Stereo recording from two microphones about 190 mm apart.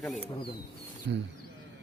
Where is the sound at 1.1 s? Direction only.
75° right (ahead or behind).